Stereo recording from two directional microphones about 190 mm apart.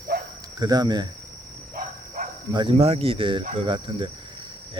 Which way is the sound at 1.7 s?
45° right (ahead or behind).